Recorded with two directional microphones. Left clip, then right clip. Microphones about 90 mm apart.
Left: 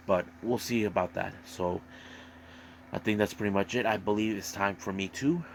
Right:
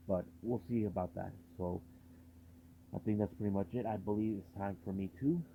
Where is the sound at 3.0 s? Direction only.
15° left (ahead or behind).